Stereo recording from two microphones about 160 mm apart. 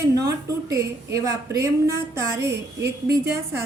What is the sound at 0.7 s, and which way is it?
A woman's voice, 20° right (ahead or behind).